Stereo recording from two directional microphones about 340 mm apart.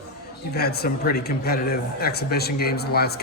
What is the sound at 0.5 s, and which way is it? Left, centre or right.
Speech, left.